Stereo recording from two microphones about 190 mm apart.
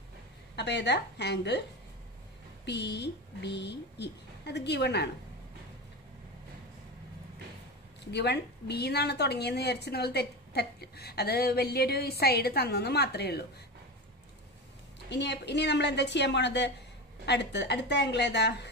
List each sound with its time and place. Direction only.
0.6 s a woman's voice: 65° left (ahead or behind)
2.6 s a woman's voice: 65° left (ahead or behind)
8.1 s a woman's voice: 60° left (ahead or behind)
15.0 s a woman's voice: 65° left (ahead or behind)